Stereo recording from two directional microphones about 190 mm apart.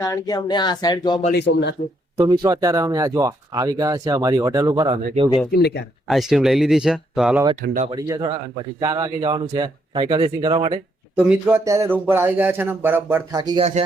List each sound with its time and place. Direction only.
0.0 s speech: 20° left (ahead or behind)
1.3 s a man's voice: 65° left (ahead or behind)
2.1 s speech: 25° right (ahead or behind)
5.5 s a man's voice: 60° left (ahead or behind)
6.1 s speech: centre (ahead or behind)
7.9 s speech: 20° right (ahead or behind)
11.2 s speech: 10° right (ahead or behind)